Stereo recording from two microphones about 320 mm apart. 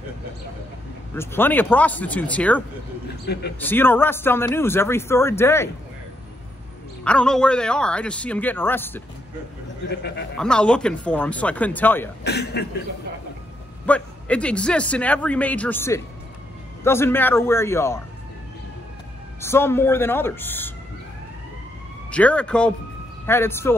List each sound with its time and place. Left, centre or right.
1.1 s a man's voice: centre
7.1 s a man's voice: centre
9.8 s speech: left
10.3 s a man's voice: centre
12.2 s speech: left
13.8 s a man's voice: centre
19.4 s speech: centre
22.1 s a man's voice: centre